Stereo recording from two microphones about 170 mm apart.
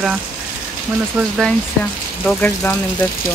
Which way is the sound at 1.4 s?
10° left (ahead or behind).